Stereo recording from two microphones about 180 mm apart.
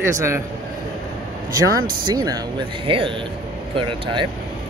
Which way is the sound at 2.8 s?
30° right (ahead or behind).